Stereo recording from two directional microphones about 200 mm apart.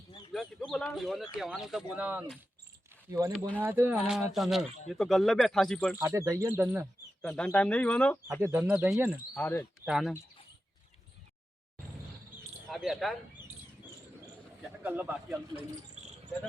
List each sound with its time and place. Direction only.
0.3 s speech: centre (ahead or behind)
6.0 s speech: 15° right (ahead or behind)
6.6 s speech: centre (ahead or behind)
8.4 s speech: 10° right (ahead or behind)
9.3 s speech: 10° left (ahead or behind)
9.8 s speech: centre (ahead or behind)
12.6 s speech: centre (ahead or behind)
14.8 s speech: 10° right (ahead or behind)